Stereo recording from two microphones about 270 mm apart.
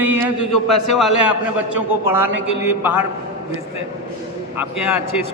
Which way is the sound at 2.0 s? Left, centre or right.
Centre.